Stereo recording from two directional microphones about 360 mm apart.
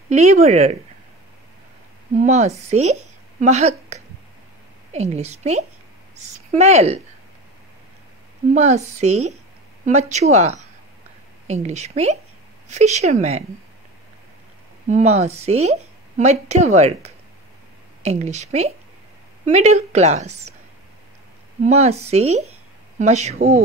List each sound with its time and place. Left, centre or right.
0.1 s a woman's voice: centre
2.1 s a woman's voice: centre
8.5 s a woman's voice: centre
14.9 s a woman's voice: centre
21.6 s a woman's voice: centre